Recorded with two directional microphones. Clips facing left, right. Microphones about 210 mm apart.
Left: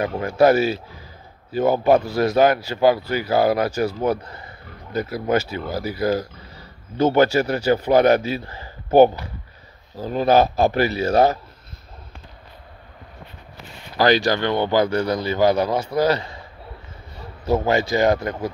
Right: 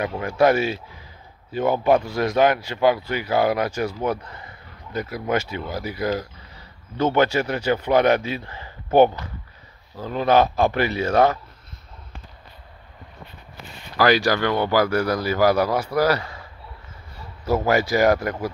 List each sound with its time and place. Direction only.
0.0 s a man's voice: 35° left (ahead or behind)
14.3 s speech: 25° left (ahead or behind)
17.5 s speech: 25° left (ahead or behind)